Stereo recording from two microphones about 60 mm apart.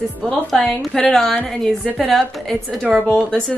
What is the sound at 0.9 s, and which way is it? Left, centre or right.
A woman's voice, centre.